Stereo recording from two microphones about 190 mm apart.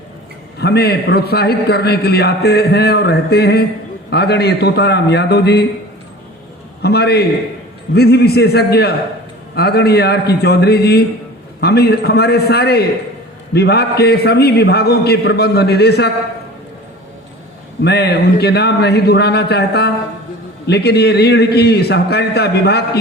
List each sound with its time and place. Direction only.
0.6 s a man's voice: 60° left (ahead or behind)
6.8 s a man's voice: 60° left (ahead or behind)
17.8 s a man's voice: 60° left (ahead or behind)